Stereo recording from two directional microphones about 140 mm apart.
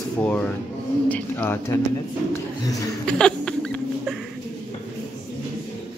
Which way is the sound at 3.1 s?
5° left (ahead or behind).